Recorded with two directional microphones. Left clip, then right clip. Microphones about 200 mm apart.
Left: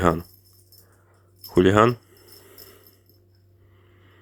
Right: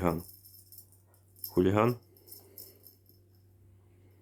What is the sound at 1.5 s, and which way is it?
Speech, 20° left (ahead or behind).